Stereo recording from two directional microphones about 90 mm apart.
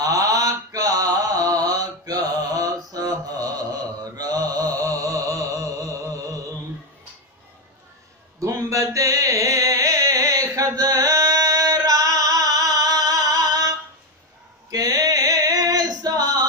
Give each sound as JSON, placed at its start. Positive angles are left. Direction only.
{"t": 0.0, "sound": "mantra", "side_deg": -40}
{"t": 8.4, "sound": "a sound", "side_deg": -35}
{"t": 14.7, "sound": "female singing", "side_deg": -45}